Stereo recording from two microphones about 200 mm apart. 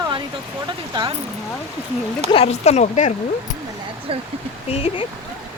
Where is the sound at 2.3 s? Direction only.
30° left (ahead or behind).